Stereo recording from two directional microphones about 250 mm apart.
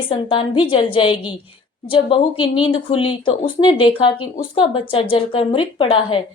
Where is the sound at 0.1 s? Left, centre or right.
Centre.